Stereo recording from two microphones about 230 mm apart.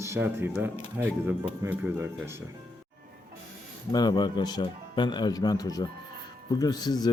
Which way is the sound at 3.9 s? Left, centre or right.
Centre.